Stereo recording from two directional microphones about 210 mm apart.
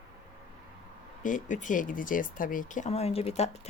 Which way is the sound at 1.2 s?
40° left (ahead or behind).